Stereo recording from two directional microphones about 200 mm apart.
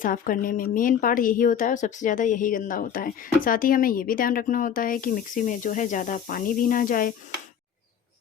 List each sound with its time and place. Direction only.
0.0 s speech: 45° left (ahead or behind)